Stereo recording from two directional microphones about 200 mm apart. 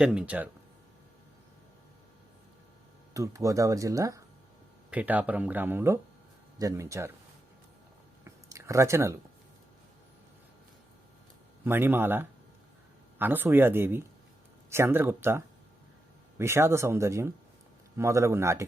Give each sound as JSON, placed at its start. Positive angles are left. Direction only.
{"t": 0.0, "sound": "speech", "side_deg": -5}
{"t": 3.2, "sound": "speech", "side_deg": -15}
{"t": 8.2, "sound": "a sound", "side_deg": -15}
{"t": 11.6, "sound": "speech", "side_deg": -10}